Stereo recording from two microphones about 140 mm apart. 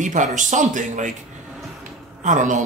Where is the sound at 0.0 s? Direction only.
65° right (ahead or behind).